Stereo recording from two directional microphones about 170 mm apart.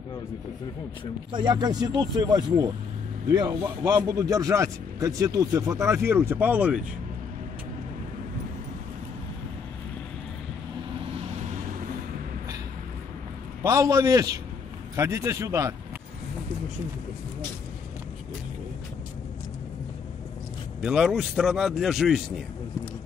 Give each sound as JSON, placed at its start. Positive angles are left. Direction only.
{"t": 1.3, "sound": "speech", "side_deg": -25}
{"t": 13.6, "sound": "a man's voice", "side_deg": -20}
{"t": 20.8, "sound": "a man's voice", "side_deg": 0}